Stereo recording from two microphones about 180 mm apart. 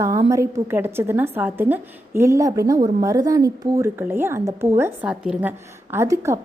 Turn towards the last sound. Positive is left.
turn(degrees=-15)  # may be behind; listen again after turning